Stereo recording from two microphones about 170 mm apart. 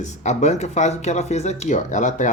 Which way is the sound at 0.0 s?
45° left (ahead or behind).